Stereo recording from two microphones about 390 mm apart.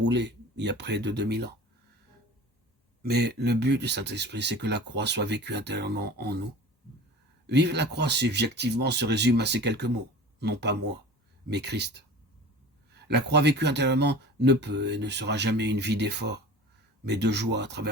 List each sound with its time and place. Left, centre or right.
0.0 s speech: right
3.0 s speech: right
7.4 s speech: right